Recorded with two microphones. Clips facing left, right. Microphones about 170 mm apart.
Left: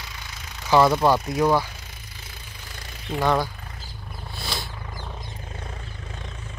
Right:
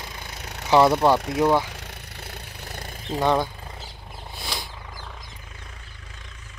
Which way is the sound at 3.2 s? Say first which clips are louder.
Right 1 dB; 20° right (ahead or behind).